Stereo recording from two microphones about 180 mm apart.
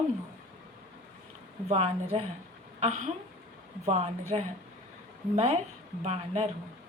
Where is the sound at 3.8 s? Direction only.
35° right (ahead or behind).